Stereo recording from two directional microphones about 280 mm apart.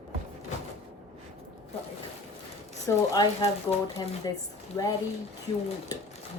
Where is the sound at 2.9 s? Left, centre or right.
Centre.